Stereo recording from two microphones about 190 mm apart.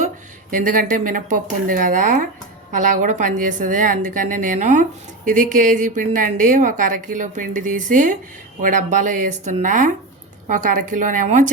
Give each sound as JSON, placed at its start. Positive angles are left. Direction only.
{"t": 0.5, "sound": "a woman's voice", "side_deg": -45}